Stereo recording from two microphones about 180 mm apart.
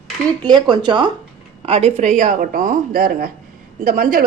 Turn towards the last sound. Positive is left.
turn(degrees=-55)  # may be behind; listen again after turning